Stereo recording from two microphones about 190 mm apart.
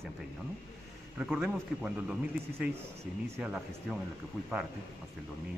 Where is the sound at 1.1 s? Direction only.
5° right (ahead or behind).